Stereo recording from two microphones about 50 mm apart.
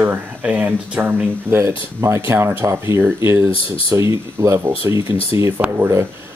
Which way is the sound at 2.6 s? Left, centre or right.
Right.